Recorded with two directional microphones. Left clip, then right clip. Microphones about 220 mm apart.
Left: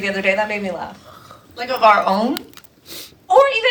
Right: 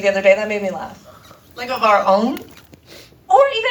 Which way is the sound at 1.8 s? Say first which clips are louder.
Even; 35° left (ahead or behind).